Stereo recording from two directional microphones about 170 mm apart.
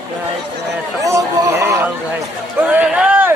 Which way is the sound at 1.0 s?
20° right (ahead or behind).